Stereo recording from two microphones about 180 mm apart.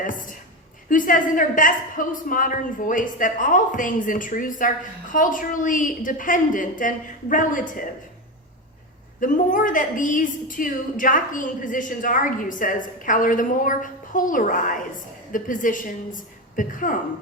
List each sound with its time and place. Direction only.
0.0 s a woman's voice: 45° left (ahead or behind)
9.2 s a woman's voice: 45° left (ahead or behind)